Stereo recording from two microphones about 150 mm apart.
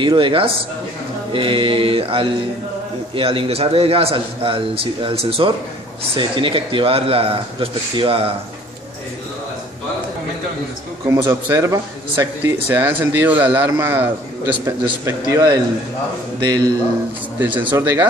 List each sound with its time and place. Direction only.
0.0 s a man's voice: 35° right (ahead or behind)
11.1 s a man's voice: 20° right (ahead or behind)
17.4 s speech: 15° right (ahead or behind)